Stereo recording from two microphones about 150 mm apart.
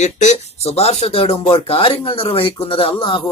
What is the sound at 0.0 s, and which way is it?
Speech, 50° left (ahead or behind).